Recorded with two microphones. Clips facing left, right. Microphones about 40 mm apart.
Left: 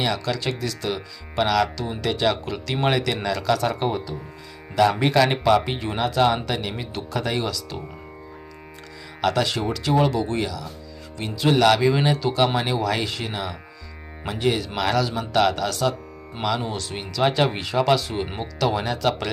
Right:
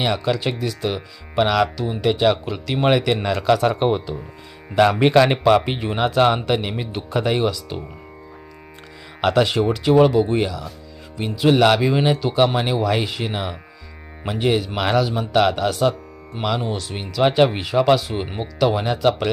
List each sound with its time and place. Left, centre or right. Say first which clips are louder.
0.0 s speech: right 4 dB; right
3.2 s a man's voice: right 4 dB; right
5.2 s speech: right 3 dB; right
6.0 s speech: right 3 dB; right
9.2 s speech: right 5 dB; right
11.2 s speech: right 3 dB; centre
16.6 s speech: right 3 dB; centre